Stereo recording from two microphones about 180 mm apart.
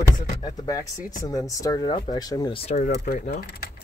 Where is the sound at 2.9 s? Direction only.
60° left (ahead or behind).